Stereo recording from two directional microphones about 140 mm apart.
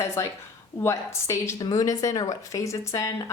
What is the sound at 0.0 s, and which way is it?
A woman's voice, 20° left (ahead or behind).